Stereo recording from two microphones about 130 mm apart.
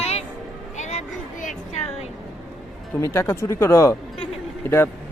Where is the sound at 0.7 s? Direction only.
65° left (ahead or behind).